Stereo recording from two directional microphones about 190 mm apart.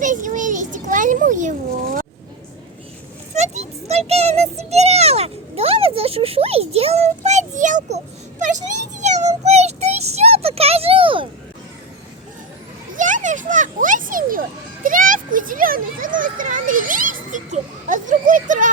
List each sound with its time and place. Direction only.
0.0 s a child's voice: 40° right (ahead or behind)
3.3 s a child's voice: 35° right (ahead or behind)
13.0 s children playing: 40° right (ahead or behind)
14.8 s a child's voice: 45° right (ahead or behind)